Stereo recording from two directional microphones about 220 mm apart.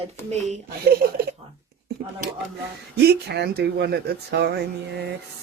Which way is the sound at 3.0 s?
50° right (ahead or behind).